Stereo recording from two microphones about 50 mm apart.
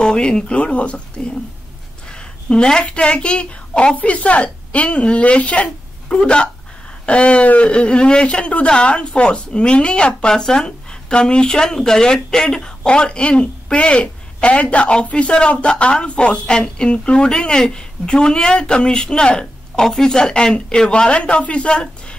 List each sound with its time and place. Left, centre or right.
0.0 s a woman's voice: centre